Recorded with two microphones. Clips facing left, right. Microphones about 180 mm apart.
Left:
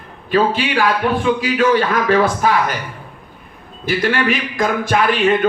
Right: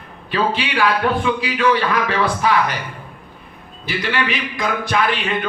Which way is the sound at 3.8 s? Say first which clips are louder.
Left 5 dB; 45° left (ahead or behind).